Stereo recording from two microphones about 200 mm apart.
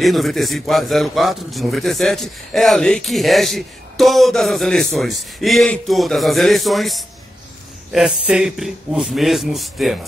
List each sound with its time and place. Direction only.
0.0 s a man's voice: centre (ahead or behind)